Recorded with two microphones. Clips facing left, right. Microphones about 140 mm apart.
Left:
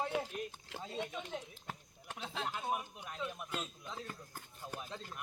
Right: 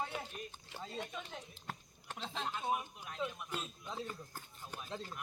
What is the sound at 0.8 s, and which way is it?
Speech, centre (ahead or behind).